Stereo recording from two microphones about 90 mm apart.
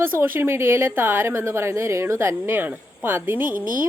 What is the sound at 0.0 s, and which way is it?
Speech, 25° right (ahead or behind).